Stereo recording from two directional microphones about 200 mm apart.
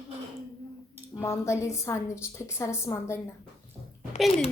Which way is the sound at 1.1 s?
15° left (ahead or behind).